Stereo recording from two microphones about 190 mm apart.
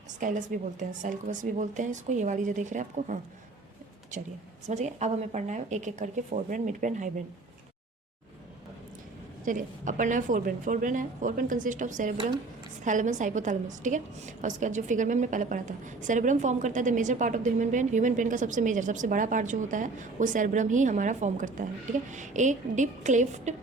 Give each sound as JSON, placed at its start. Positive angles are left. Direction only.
{"t": 0.2, "sound": "a woman's voice", "side_deg": -45}
{"t": 4.6, "sound": "a woman's voice", "side_deg": -35}
{"t": 9.4, "sound": "a woman's voice", "side_deg": -45}